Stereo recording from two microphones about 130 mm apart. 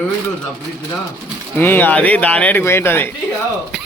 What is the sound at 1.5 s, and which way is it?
Speech, 15° left (ahead or behind).